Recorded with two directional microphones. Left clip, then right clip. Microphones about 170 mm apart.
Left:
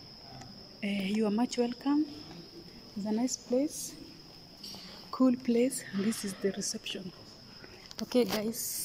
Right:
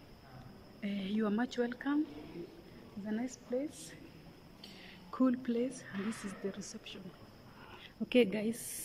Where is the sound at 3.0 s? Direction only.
15° left (ahead or behind).